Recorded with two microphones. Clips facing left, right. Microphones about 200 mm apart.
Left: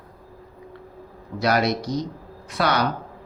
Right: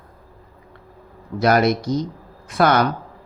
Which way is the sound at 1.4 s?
50° right (ahead or behind).